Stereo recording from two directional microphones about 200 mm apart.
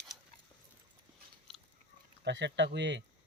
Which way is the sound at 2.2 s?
60° right (ahead or behind).